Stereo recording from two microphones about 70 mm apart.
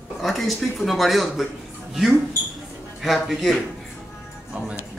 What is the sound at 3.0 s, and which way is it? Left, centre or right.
Speech, centre.